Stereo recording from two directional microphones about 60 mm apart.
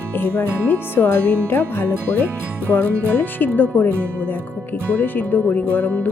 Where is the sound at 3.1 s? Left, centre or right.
Left.